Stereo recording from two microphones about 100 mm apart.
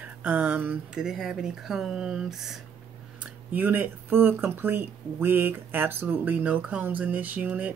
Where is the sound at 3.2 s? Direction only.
15° right (ahead or behind).